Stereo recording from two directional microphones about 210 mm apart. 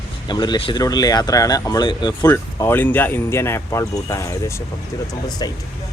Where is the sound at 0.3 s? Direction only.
20° left (ahead or behind).